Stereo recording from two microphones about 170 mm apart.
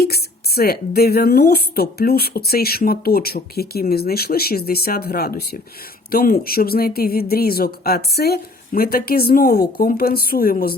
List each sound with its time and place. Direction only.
0.0 s speech: 65° left (ahead or behind)